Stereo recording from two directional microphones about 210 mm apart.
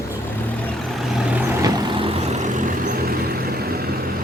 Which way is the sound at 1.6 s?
20° right (ahead or behind).